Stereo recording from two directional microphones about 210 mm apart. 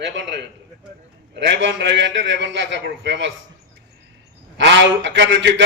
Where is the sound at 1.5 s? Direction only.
60° right (ahead or behind).